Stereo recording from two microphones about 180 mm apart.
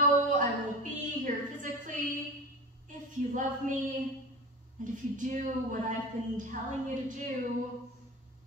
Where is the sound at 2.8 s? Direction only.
45° right (ahead or behind).